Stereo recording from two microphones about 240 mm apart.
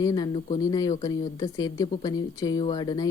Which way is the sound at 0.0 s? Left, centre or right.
Centre.